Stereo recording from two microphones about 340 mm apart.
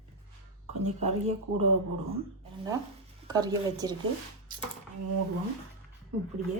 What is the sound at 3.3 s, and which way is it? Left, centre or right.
Speech, centre.